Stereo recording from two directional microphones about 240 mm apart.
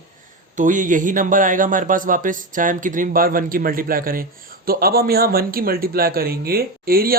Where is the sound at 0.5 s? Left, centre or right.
Right.